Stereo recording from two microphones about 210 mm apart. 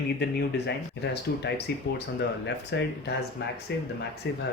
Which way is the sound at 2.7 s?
55° left (ahead or behind).